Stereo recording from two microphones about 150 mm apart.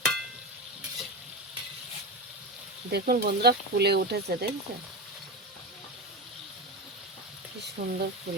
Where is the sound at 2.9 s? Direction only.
80° right.